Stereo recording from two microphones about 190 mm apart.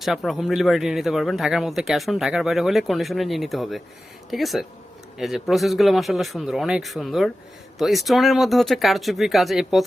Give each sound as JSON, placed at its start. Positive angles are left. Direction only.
{"t": 0.0, "sound": "speech", "side_deg": 0}